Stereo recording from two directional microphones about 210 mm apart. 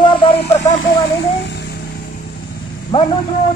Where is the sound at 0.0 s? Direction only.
20° left (ahead or behind).